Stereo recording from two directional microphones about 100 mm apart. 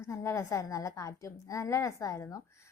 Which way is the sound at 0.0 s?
30° left (ahead or behind).